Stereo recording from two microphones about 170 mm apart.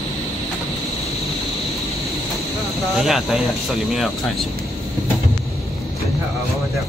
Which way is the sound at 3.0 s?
Centre (ahead or behind).